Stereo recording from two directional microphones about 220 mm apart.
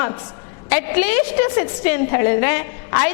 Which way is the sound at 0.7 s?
10° left (ahead or behind).